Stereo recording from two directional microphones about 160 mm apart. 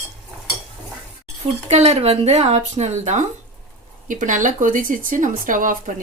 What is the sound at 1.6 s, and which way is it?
Speech, 45° right (ahead or behind).